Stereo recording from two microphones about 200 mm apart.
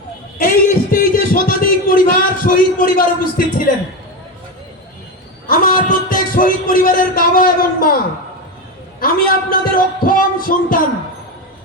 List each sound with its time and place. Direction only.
0.3 s a sound: 40° left (ahead or behind)
3.7 s speech: 45° left (ahead or behind)
5.5 s speech: 45° left (ahead or behind)
9.0 s speech: 45° left (ahead or behind)